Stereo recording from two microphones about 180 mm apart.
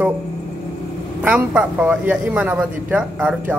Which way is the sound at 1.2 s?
5° right (ahead or behind).